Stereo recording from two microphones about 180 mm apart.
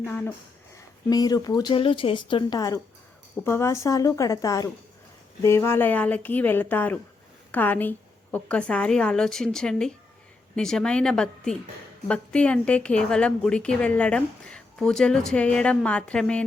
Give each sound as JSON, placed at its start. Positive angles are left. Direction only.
{"t": 0.0, "sound": "a woman's voice", "side_deg": 10}